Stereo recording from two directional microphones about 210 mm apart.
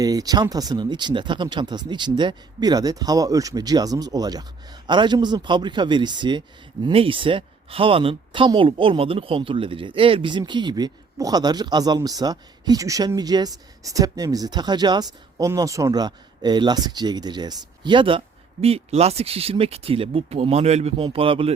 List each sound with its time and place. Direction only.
0.0 s speech: 15° right (ahead or behind)